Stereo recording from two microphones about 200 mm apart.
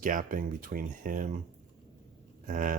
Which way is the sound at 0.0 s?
40° right (ahead or behind).